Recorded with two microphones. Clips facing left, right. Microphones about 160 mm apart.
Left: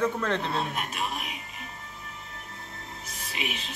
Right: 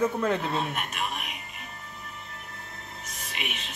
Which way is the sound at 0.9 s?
30° left (ahead or behind).